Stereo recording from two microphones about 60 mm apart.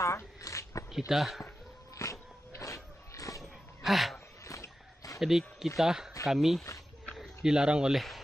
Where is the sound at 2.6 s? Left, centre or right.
Left.